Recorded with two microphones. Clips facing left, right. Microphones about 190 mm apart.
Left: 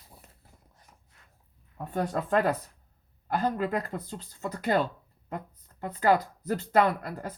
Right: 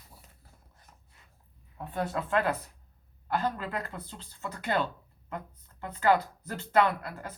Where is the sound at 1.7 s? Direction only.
45° left (ahead or behind).